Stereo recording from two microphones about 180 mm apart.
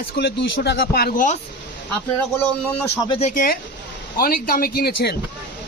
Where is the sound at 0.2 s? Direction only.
70° left (ahead or behind); by 1.4 s 50° left (ahead or behind).